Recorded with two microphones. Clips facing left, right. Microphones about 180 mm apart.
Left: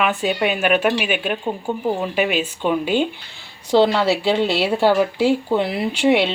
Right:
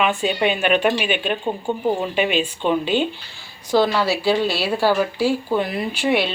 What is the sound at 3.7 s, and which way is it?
Speech, 25° left (ahead or behind).